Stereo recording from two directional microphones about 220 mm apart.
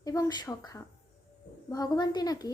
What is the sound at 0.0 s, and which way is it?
A woman's voice, 15° left (ahead or behind).